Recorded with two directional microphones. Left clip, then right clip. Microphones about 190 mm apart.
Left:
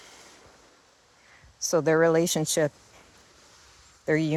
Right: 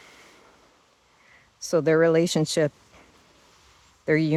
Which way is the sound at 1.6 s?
35° right (ahead or behind).